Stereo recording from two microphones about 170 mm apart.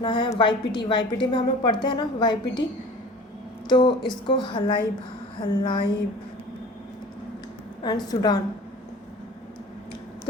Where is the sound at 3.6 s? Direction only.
25° left (ahead or behind).